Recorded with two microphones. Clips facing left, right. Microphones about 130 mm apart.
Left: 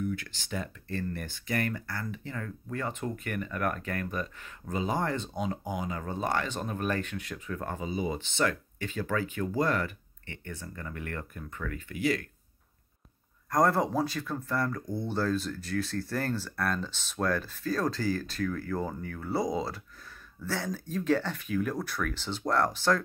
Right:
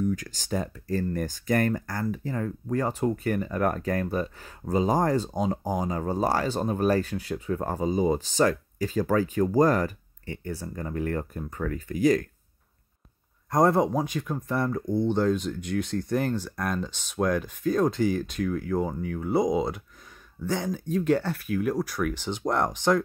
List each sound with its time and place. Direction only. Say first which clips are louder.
0.0 s speech: right 6 dB; 40° right (ahead or behind)
13.5 s speech: right 4 dB; 20° right (ahead or behind)